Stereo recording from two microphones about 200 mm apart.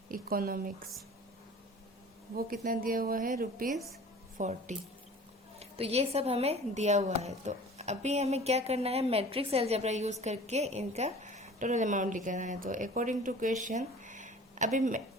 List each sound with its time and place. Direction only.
0.1 s a woman's voice: 45° right (ahead or behind)
2.6 s a woman's voice: 45° right (ahead or behind)